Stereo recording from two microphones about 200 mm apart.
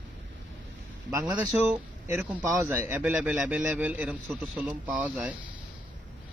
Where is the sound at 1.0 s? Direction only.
15° right (ahead or behind).